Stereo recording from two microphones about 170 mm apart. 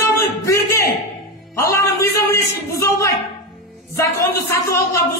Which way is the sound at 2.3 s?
15° left (ahead or behind).